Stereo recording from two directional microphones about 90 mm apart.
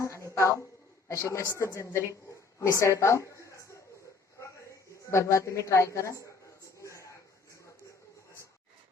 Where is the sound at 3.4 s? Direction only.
35° left (ahead or behind).